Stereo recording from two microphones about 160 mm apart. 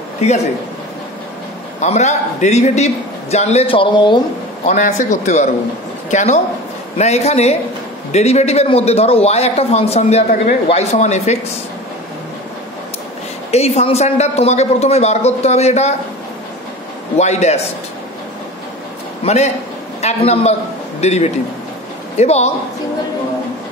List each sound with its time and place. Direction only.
0.2 s a man's voice: 45° left (ahead or behind)
1.8 s a man's voice: 45° left (ahead or behind); by 4.2 s 30° left (ahead or behind)
4.6 s a man's voice: 50° left (ahead or behind)
13.5 s a man's voice: 40° left (ahead or behind)
17.2 s a man's voice: 45° left (ahead or behind)
19.2 s a man's voice: 45° left (ahead or behind)